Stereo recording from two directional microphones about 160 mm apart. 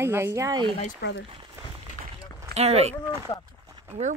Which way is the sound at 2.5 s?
40° right (ahead or behind).